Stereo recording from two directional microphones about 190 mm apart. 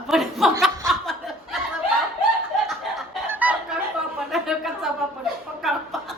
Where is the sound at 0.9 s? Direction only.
Centre (ahead or behind).